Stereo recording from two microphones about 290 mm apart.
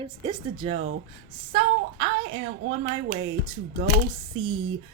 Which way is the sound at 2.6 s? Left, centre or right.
Right.